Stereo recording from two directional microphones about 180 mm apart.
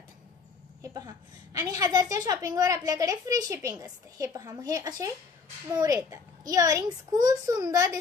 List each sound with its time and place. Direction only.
0.8 s a woman's voice: 20° right (ahead or behind)